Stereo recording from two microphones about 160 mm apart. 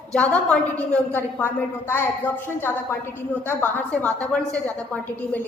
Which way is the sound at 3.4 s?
10° left (ahead or behind).